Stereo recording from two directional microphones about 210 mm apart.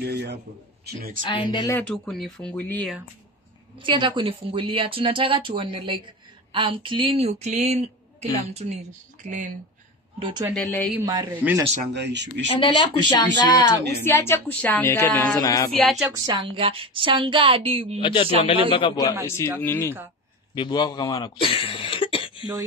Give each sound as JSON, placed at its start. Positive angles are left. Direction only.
{"t": 0.0, "sound": "speech", "side_deg": -50}
{"t": 1.2, "sound": "a man's voice", "side_deg": 25}
{"t": 1.7, "sound": "speech", "side_deg": 5}
{"t": 3.7, "sound": "a woman's voice", "side_deg": -25}
{"t": 10.1, "sound": "speech", "side_deg": -25}
{"t": 10.5, "sound": "speech", "side_deg": 5}
{"t": 11.0, "sound": "a woman's voice", "side_deg": -20}
{"t": 11.9, "sound": "speech", "side_deg": -55}
{"t": 12.5, "sound": "speech", "side_deg": 20}
{"t": 15.8, "sound": "speech", "side_deg": 0}
{"t": 16.3, "sound": "a woman's voice", "side_deg": -20}
{"t": 18.0, "sound": "a man's voice", "side_deg": 25}
{"t": 20.5, "sound": "speech", "side_deg": 20}